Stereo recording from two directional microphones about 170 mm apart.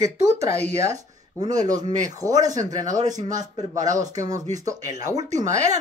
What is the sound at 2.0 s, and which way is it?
Speech, 20° right (ahead or behind).